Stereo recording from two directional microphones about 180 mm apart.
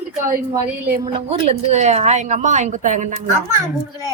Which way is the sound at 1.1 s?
30° right (ahead or behind).